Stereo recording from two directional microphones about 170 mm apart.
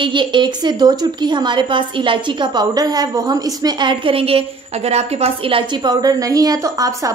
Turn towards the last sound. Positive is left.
turn(degrees=-20)  # may be behind; listen again after turning